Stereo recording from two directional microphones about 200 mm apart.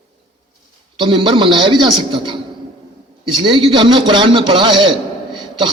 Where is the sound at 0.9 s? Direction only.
25° right (ahead or behind).